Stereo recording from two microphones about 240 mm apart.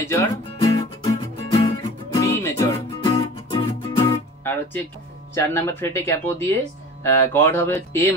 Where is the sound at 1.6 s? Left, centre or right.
Centre.